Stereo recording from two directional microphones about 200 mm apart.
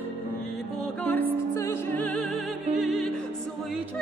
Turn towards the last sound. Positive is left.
turn(degrees=0)  # may be behind; listen again after turning